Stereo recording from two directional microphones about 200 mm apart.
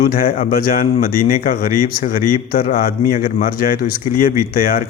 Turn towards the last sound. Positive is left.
turn(degrees=45)  # may be behind; listen again after turning